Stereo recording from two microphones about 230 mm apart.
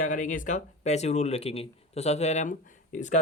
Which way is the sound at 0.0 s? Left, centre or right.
Left.